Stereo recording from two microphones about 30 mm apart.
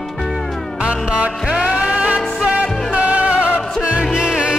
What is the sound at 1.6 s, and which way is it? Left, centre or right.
Music, right.